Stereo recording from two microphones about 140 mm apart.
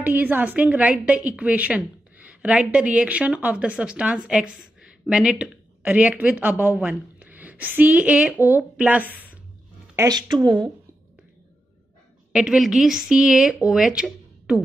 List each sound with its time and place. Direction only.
0.0 s a woman's voice: 15° right (ahead or behind)
9.9 s a woman's voice: 25° right (ahead or behind)
12.3 s a woman's voice: 5° right (ahead or behind)